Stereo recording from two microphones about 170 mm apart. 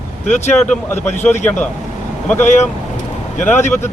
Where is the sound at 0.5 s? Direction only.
5° left (ahead or behind).